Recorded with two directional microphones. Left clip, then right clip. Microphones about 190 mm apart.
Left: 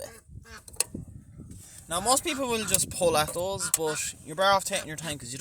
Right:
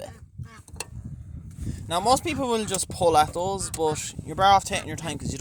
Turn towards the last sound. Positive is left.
turn(degrees=-20)  # may be behind; listen again after turning